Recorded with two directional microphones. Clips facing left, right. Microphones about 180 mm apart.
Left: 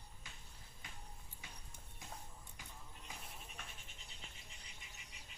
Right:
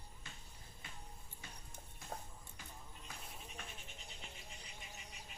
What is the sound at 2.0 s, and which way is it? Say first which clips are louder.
Music: right 5 dB; 15° left (ahead or behind).